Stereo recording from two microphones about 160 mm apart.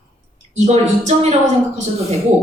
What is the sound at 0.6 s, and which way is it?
Speech, 45° right (ahead or behind).